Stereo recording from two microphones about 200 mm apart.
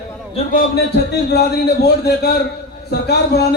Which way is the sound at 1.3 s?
55° left (ahead or behind).